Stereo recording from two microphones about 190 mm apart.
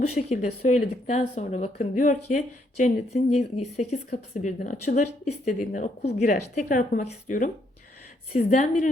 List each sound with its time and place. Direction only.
0.0 s speech: 35° left (ahead or behind)